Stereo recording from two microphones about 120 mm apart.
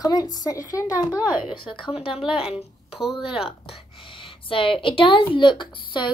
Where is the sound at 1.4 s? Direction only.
45° left (ahead or behind).